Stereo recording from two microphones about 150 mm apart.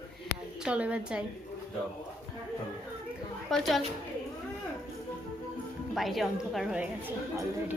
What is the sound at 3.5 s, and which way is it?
Speech, centre (ahead or behind).